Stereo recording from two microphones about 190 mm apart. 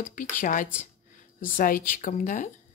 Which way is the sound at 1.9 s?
45° left (ahead or behind).